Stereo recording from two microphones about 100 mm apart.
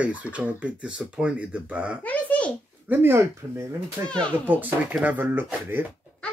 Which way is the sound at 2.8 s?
25° right (ahead or behind).